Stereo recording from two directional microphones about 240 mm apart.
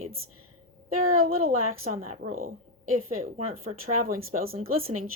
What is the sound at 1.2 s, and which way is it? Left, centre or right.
A woman's voice, right.